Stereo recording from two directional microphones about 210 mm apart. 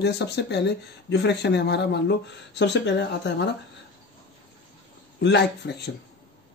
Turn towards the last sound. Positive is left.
turn(degrees=55)  # may be behind; listen again after turning